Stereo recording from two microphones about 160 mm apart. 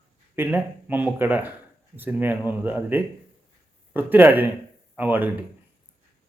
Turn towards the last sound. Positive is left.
turn(degrees=-10)  # may be behind; listen again after turning